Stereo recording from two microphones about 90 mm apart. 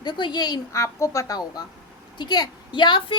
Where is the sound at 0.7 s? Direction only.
35° left (ahead or behind).